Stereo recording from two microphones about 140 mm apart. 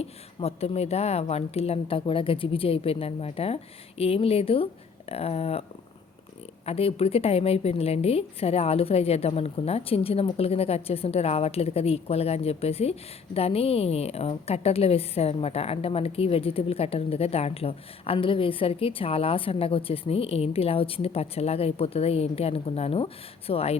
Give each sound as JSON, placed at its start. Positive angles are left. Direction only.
{"t": 0.0, "sound": "a woman's voice", "side_deg": 45}
{"t": 6.7, "sound": "a woman's voice", "side_deg": 45}